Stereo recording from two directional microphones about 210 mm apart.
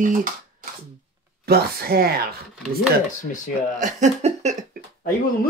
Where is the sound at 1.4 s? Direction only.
50° right (ahead or behind).